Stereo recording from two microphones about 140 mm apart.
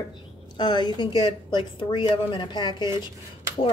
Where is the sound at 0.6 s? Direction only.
35° left (ahead or behind).